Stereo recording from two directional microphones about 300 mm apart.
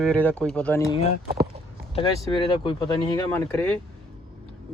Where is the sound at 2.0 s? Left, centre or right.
Centre.